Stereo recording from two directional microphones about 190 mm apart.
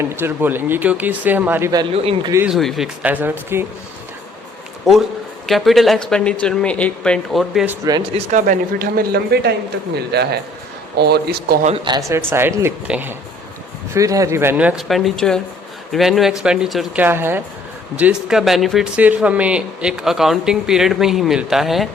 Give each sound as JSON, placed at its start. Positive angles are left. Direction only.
{"t": 0.0, "sound": "speech", "side_deg": -10}
{"t": 2.3, "sound": "speech", "side_deg": -10}
{"t": 4.9, "sound": "speech", "side_deg": 0}
{"t": 7.9, "sound": "speech", "side_deg": -20}
{"t": 8.3, "sound": "speech", "side_deg": -45}
{"t": 11.9, "sound": "speech", "side_deg": -15}